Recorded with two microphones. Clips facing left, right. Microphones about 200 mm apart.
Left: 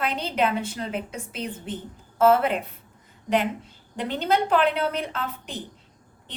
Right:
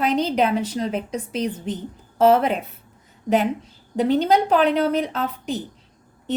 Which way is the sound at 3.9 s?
40° right (ahead or behind).